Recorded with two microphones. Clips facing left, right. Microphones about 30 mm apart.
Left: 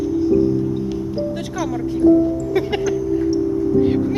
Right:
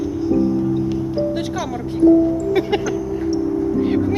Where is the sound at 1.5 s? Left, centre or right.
Centre.